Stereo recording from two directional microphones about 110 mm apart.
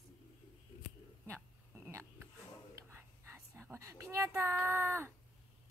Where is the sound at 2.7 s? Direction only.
20° right (ahead or behind).